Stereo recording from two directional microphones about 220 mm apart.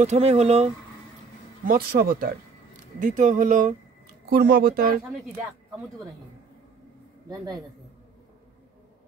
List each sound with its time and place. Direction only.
0.0 s speech: 30° right (ahead or behind)
1.7 s speech: 45° right (ahead or behind)
7.2 s a man's voice: 15° right (ahead or behind)